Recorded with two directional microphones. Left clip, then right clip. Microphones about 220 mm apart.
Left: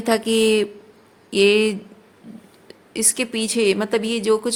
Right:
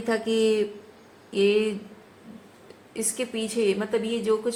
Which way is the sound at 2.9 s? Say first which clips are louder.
Left 6 dB; 45° left (ahead or behind).